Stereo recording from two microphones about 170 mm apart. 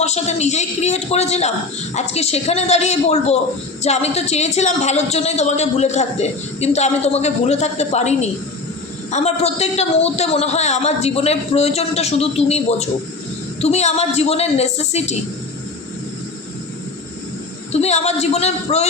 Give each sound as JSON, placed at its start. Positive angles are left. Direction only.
{"t": 0.0, "sound": "a man's voice", "side_deg": 40}
{"t": 17.7, "sound": "a man's voice", "side_deg": 40}